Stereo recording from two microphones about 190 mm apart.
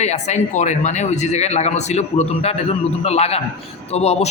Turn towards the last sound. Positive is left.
turn(degrees=35)  # may be behind; listen again after turning